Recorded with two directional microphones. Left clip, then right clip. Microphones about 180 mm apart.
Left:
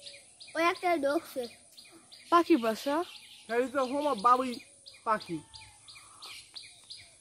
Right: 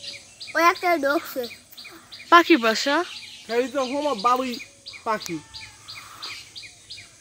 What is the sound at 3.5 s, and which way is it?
Speech, 45° right (ahead or behind).